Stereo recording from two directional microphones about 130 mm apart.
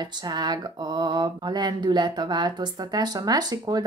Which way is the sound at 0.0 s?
35° right (ahead or behind).